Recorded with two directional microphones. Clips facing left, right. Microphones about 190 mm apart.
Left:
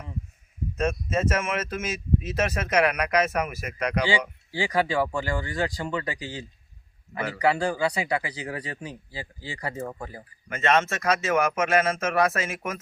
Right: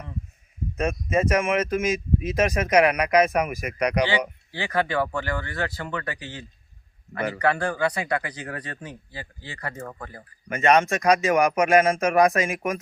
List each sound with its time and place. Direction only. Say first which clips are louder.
0.8 s speech: right 2 dB; 10° right (ahead or behind)
4.5 s speech: even; 10° left (ahead or behind)
10.5 s speech: right 4 dB; 15° right (ahead or behind)